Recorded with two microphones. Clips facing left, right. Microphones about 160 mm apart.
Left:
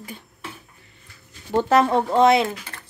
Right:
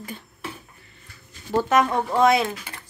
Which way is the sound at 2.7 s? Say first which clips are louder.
Even; 15° right (ahead or behind).